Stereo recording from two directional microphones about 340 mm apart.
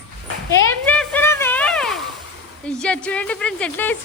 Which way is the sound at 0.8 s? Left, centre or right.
Centre.